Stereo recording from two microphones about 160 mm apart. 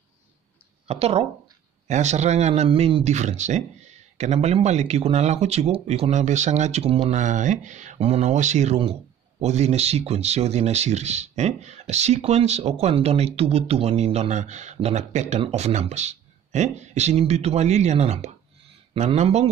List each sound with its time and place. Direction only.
0.8 s a man's voice: 40° right (ahead or behind)